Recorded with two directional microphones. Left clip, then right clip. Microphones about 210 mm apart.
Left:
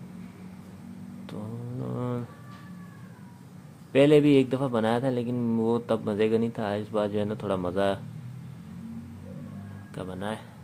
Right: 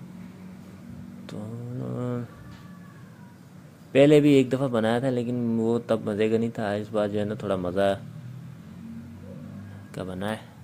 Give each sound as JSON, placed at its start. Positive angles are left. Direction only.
{"t": 1.2, "sound": "vehicle", "side_deg": -5}
{"t": 3.9, "sound": "a man's voice", "side_deg": -5}
{"t": 9.9, "sound": "speech", "side_deg": -15}